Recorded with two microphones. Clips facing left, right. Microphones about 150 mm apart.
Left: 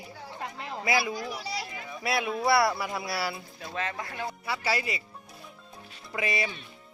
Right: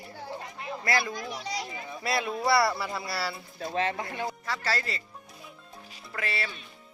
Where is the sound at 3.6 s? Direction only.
35° right (ahead or behind).